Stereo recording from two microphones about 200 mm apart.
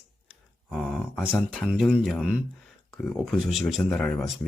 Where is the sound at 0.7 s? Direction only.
Centre (ahead or behind).